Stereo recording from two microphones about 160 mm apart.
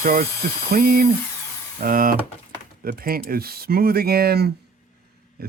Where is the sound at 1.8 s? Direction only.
60° right (ahead or behind).